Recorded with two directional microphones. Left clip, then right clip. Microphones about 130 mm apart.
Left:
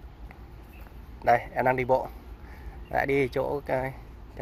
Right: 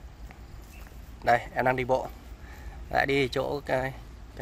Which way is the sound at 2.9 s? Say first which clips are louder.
Even; 15° right (ahead or behind).